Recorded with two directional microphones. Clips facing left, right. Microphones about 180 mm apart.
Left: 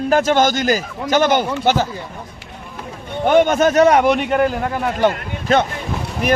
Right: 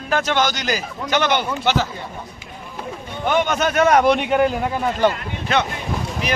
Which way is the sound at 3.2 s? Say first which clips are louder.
Left 6 dB; 50° left (ahead or behind).